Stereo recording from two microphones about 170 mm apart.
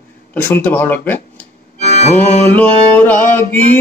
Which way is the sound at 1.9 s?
45° left (ahead or behind).